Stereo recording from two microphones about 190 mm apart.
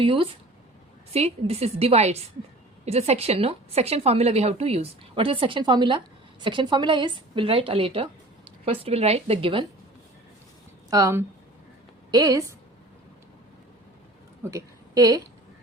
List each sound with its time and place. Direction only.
0.0 s a woman's voice: 25° right (ahead or behind)
10.8 s a woman's voice: 20° right (ahead or behind)
14.4 s a woman's voice: 15° right (ahead or behind)